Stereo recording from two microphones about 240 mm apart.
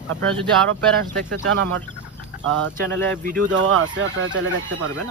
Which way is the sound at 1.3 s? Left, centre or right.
Right.